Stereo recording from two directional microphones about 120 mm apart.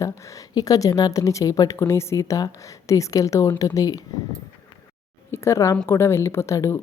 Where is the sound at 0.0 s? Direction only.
25° left (ahead or behind).